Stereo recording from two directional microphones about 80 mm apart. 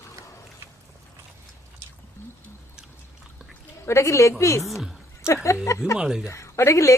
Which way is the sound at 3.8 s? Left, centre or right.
Left.